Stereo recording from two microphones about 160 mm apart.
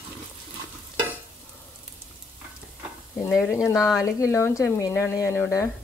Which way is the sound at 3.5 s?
15° left (ahead or behind).